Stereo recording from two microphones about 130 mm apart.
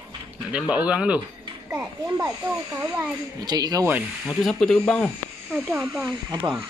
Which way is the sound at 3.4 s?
30° right (ahead or behind).